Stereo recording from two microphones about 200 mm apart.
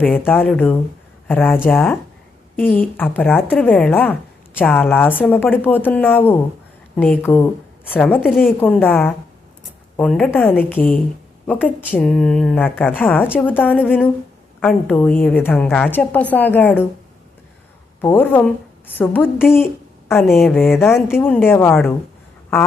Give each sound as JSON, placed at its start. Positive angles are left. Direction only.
{"t": 0.0, "sound": "a woman's voice", "side_deg": 10}
{"t": 18.0, "sound": "a woman's voice", "side_deg": 10}
{"t": 20.2, "sound": "a woman's voice", "side_deg": 0}